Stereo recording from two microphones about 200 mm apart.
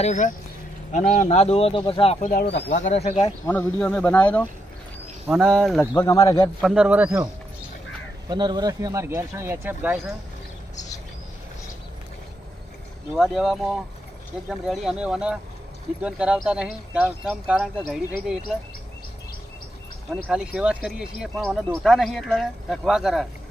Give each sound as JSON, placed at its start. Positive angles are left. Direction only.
{"t": 0.0, "sound": "speech", "side_deg": 40}
{"t": 2.2, "sound": "speech", "side_deg": 50}
{"t": 2.5, "sound": "speech", "side_deg": 35}
{"t": 3.2, "sound": "speech", "side_deg": 15}
{"t": 5.2, "sound": "speech", "side_deg": -5}
{"t": 5.9, "sound": "speech", "side_deg": 15}
{"t": 6.6, "sound": "speech", "side_deg": -5}
{"t": 8.3, "sound": "speech", "side_deg": -20}
{"t": 13.1, "sound": "speech", "side_deg": 0}
{"t": 20.2, "sound": "speech", "side_deg": -5}